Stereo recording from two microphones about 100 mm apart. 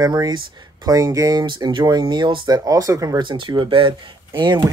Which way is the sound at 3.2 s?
55° right (ahead or behind).